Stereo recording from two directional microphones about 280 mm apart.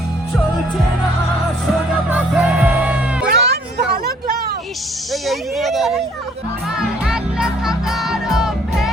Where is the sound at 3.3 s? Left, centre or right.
Right.